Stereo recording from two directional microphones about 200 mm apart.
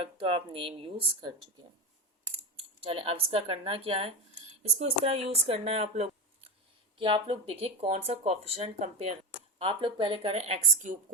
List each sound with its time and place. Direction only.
0.0 s speech: 25° right (ahead or behind)
2.6 s speech: 25° right (ahead or behind)